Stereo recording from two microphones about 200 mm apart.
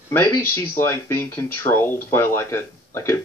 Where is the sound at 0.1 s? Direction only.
10° left (ahead or behind).